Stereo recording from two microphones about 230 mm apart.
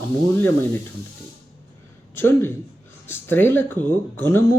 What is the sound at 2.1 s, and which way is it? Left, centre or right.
Speech, centre.